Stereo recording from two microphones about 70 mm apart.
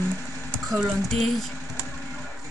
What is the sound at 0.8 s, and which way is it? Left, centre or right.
Speech, centre.